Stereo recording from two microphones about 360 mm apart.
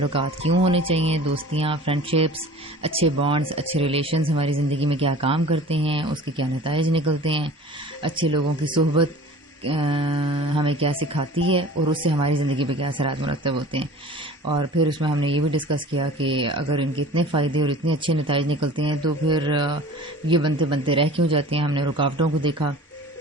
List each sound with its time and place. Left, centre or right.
0.1 s speech: centre
14.8 s speech: centre